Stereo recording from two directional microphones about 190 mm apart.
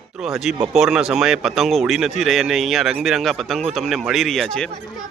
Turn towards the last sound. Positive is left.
turn(degrees=5)  # may be behind; listen again after turning